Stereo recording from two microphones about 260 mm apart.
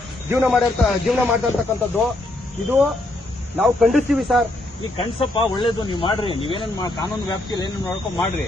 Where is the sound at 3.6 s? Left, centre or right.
Centre.